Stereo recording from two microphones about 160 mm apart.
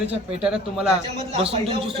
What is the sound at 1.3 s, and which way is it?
Speech, 35° right (ahead or behind).